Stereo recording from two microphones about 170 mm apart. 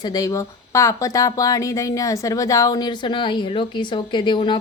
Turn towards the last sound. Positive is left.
turn(degrees=30)  # may be behind; listen again after turning